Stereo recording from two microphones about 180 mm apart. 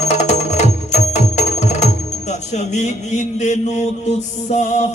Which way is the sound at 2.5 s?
40° left (ahead or behind).